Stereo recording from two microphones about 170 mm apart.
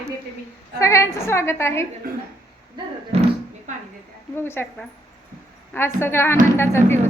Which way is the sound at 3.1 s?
35° right (ahead or behind).